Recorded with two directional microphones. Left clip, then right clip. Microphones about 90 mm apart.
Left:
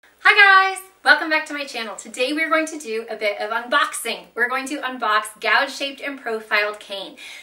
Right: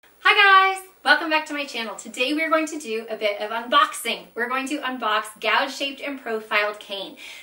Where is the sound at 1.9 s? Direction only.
5° left (ahead or behind).